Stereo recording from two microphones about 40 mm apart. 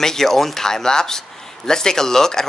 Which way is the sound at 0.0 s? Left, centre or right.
Centre.